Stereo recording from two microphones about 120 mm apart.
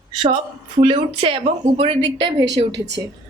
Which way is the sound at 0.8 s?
50° right (ahead or behind).